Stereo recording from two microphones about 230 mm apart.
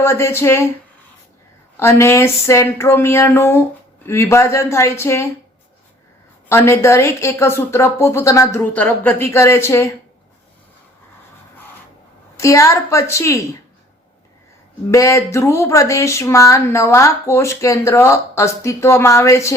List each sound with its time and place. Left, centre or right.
0.0 s speech: centre
1.7 s speech: centre
6.5 s speech: centre
12.4 s speech: centre
14.8 s speech: centre